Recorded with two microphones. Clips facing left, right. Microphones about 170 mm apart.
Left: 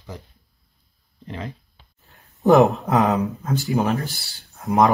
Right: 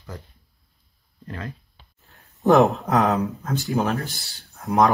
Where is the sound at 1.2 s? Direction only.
20° left (ahead or behind).